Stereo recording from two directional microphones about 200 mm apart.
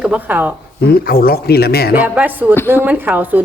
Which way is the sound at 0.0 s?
5° right (ahead or behind).